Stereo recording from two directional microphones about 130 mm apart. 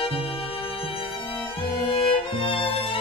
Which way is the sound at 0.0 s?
45° left (ahead or behind).